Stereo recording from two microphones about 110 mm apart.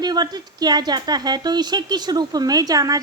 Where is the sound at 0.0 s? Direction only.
40° right (ahead or behind).